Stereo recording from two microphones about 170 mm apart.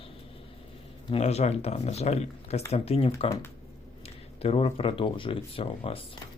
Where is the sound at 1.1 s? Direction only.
40° left (ahead or behind).